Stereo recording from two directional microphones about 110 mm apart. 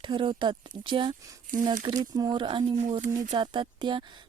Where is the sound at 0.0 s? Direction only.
45° right (ahead or behind).